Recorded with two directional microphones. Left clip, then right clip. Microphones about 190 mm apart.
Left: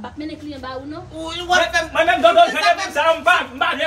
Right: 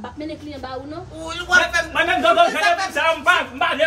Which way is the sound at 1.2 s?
5° right (ahead or behind).